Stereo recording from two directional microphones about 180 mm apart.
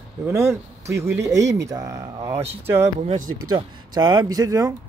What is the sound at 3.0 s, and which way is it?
Speech, 45° right (ahead or behind).